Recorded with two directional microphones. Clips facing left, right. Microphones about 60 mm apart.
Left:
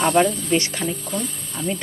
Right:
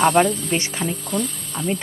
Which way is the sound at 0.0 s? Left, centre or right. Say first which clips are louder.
Right 2 dB; right.